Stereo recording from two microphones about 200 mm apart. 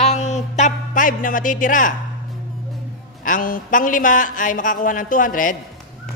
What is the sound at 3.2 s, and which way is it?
A man's voice, 45° left (ahead or behind).